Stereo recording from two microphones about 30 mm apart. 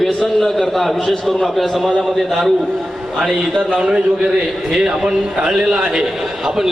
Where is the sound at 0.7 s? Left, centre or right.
Centre.